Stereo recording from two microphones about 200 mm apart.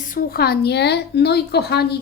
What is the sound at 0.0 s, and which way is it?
A woman's voice, 45° left (ahead or behind).